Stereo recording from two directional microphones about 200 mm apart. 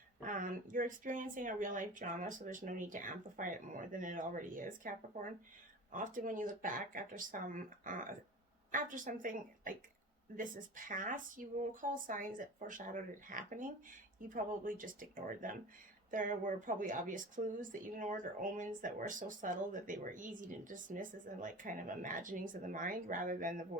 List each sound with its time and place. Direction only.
0.3 s speech: 45° right (ahead or behind)